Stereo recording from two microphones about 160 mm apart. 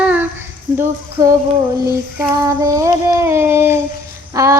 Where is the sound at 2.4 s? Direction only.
20° right (ahead or behind).